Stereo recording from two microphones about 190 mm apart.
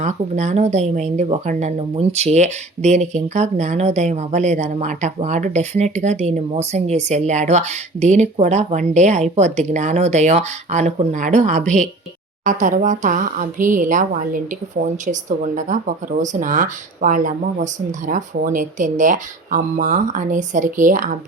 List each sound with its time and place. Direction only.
0.0 s a woman's voice: 40° right (ahead or behind)